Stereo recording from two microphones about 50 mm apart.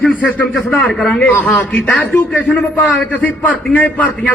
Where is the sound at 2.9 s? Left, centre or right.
Left.